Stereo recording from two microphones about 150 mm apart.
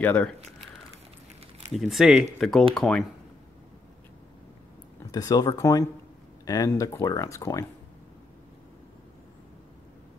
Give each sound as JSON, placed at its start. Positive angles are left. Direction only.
{"t": 0.0, "sound": "speech", "side_deg": 10}
{"t": 1.7, "sound": "speech", "side_deg": 0}
{"t": 5.1, "sound": "speech", "side_deg": 25}